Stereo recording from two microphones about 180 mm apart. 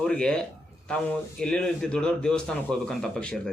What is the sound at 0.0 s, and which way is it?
Speech, 5° left (ahead or behind).